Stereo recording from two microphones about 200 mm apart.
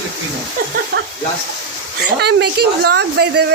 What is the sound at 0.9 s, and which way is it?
Speech, 50° right (ahead or behind).